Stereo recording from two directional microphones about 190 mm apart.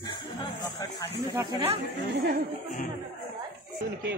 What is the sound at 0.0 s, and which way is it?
Chatter, 20° left (ahead or behind).